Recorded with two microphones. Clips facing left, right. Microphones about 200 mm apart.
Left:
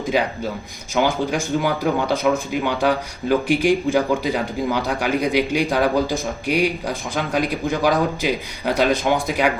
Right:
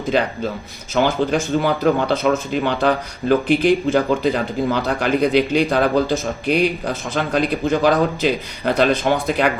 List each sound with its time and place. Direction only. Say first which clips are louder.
0.9 s speech: right 2 dB; 10° left (ahead or behind)